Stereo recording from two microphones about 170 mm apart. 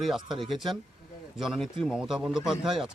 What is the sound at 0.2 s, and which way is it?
Speech, 30° right (ahead or behind).